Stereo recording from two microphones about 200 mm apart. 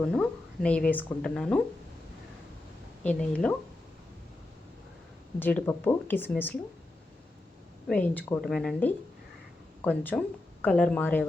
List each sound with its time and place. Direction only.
0.0 s speech: 5° left (ahead or behind)
3.0 s speech: 5° left (ahead or behind)
5.4 s speech: 10° left (ahead or behind)
7.9 s speech: 5° left (ahead or behind)